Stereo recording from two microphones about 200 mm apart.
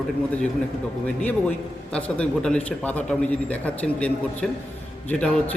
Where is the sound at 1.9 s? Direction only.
5° left (ahead or behind).